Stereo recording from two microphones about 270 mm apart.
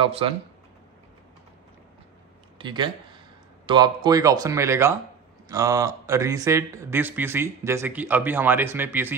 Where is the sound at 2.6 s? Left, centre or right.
Centre.